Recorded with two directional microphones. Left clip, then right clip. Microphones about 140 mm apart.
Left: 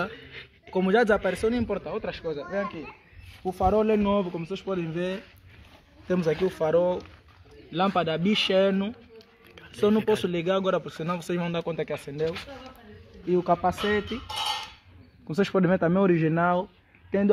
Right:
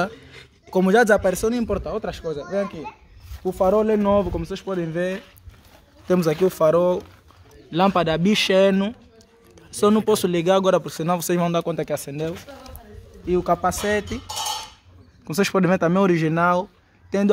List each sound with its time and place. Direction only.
0.1 s a sound: 15° right (ahead or behind)
0.7 s speech: 90° right
3.4 s speech: 65° right (ahead or behind); by 4.0 s 50° right (ahead or behind)
4.0 s a man's voice: 35° right (ahead or behind)
4.9 s speech: 60° right (ahead or behind)
6.0 s speech: 80° right
7.7 s a man's voice: 45° right (ahead or behind)
10.1 s speech: 60° right (ahead or behind); by 12.3 s 90° right
13.3 s a man's voice: 15° right (ahead or behind)
13.6 s cutlery: 25° right (ahead or behind)
15.2 s speech: 10° right (ahead or behind)